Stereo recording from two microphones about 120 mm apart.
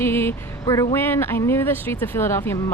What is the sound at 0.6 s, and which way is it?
Speech, 30° left (ahead or behind).